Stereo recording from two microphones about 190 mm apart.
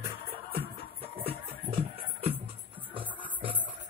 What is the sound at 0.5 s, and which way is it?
Music, 30° right (ahead or behind).